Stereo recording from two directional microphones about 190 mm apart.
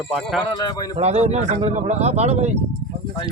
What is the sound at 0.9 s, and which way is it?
Speech, 35° right (ahead or behind).